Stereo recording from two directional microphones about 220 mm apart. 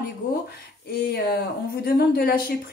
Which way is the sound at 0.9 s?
50° left (ahead or behind).